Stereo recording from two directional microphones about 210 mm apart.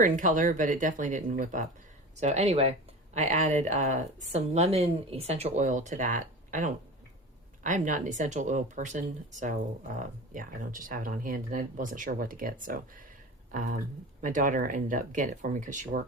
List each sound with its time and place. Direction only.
0.0 s speech: 40° right (ahead or behind)